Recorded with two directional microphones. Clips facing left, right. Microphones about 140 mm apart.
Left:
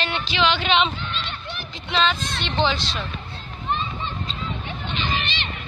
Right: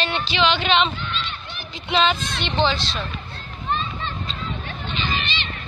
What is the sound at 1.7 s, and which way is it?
Speech, 5° right (ahead or behind).